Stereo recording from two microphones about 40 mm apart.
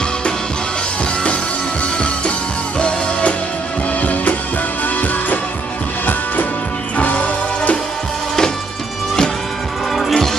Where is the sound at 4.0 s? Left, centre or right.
Left.